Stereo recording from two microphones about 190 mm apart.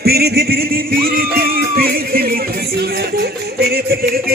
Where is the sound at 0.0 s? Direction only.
55° right (ahead or behind).